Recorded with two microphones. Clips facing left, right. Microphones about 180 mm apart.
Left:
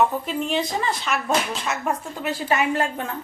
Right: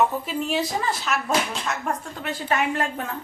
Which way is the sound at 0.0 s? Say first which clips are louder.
Left 1 dB; 5° right (ahead or behind).